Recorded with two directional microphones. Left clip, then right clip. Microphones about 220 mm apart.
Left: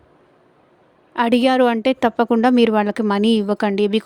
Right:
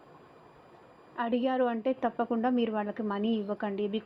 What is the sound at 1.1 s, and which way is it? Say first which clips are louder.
Speech: left 14 dB; 70° left (ahead or behind).